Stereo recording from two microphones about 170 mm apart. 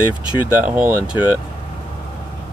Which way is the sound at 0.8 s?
10° right (ahead or behind).